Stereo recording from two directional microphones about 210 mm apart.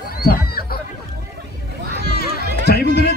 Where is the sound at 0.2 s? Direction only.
45° left (ahead or behind).